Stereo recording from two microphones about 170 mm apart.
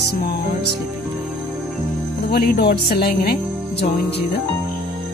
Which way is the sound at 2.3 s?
65° left (ahead or behind).